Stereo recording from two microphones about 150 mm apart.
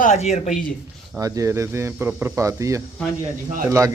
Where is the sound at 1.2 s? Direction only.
20° right (ahead or behind).